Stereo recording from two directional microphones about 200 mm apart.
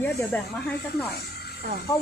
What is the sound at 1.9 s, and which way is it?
Speech, 15° left (ahead or behind).